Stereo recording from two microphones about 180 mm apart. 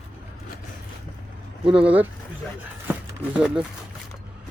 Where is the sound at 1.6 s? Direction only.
5° right (ahead or behind).